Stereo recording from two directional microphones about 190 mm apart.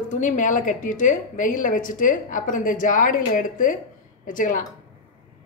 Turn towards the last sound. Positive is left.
turn(degrees=45)  # may be behind; listen again after turning